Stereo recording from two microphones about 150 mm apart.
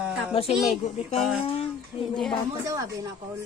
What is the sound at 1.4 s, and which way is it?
Speech, 40° left (ahead or behind).